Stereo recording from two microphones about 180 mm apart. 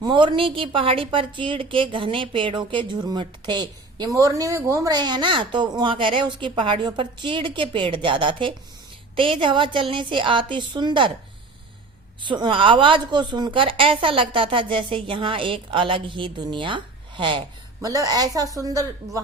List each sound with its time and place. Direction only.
0.0 s a woman's voice: 25° right (ahead or behind)
12.2 s a woman's voice: 25° right (ahead or behind)